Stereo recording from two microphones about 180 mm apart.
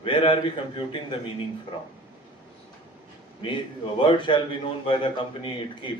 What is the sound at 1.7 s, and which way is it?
Speech, 30° left (ahead or behind).